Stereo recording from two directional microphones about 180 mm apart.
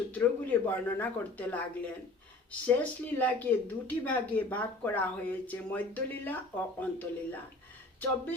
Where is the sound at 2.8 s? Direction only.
10° left (ahead or behind).